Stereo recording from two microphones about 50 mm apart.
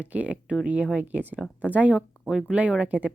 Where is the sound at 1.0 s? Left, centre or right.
Right.